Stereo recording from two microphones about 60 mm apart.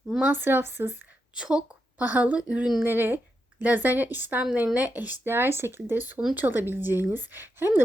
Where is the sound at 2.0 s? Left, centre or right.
Right.